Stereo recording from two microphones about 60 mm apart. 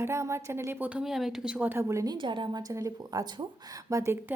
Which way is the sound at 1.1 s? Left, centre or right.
Centre.